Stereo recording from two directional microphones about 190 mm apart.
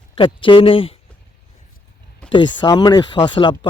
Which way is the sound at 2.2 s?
25° left (ahead or behind).